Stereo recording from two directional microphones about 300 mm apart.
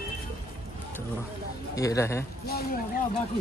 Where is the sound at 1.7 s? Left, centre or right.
Centre.